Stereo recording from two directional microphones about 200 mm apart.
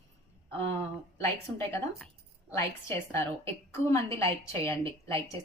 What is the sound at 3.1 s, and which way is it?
A woman's voice, 15° left (ahead or behind).